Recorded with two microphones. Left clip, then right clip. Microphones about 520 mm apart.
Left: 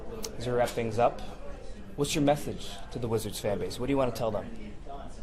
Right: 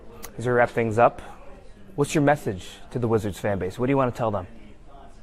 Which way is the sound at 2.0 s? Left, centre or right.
Right.